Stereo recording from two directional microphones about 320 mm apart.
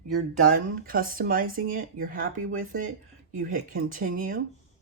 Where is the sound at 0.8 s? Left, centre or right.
Right.